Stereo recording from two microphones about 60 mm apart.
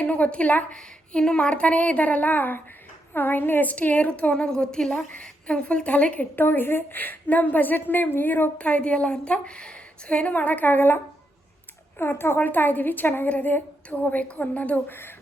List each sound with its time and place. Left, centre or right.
0.0 s a woman's voice: left
0.8 s a woman's voice: centre
6.4 s a woman's voice: left